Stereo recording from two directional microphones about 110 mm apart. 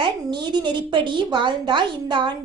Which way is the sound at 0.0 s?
45° right (ahead or behind).